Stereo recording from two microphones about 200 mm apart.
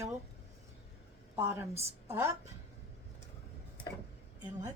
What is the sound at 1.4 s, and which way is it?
Speech, 10° right (ahead or behind).